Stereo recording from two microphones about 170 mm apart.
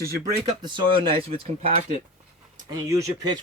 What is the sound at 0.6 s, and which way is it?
Speech, 30° right (ahead or behind).